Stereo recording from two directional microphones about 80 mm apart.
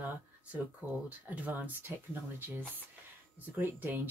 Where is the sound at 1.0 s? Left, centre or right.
Right.